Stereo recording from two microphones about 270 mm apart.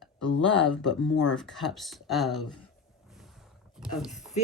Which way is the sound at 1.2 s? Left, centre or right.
Centre.